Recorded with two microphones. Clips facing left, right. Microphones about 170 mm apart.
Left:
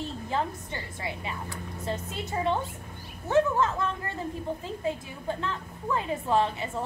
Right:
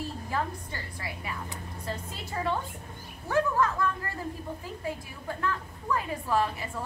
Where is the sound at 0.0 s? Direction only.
25° left (ahead or behind).